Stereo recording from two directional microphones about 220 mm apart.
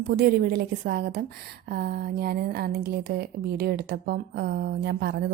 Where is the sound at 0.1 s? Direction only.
45° right (ahead or behind).